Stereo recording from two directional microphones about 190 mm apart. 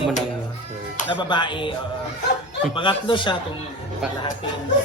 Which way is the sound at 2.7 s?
25° left (ahead or behind).